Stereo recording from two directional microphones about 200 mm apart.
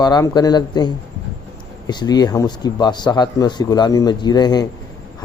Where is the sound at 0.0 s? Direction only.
20° left (ahead or behind).